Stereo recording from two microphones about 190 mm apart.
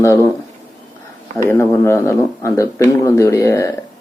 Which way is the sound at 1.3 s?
15° left (ahead or behind).